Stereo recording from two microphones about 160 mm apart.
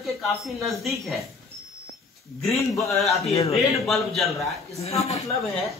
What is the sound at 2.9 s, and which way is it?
Speech, centre (ahead or behind).